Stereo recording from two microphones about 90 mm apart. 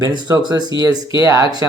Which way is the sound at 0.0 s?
45° right (ahead or behind).